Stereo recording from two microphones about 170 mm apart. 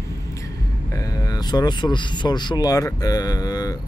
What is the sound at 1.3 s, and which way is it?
Speech, 25° left (ahead or behind).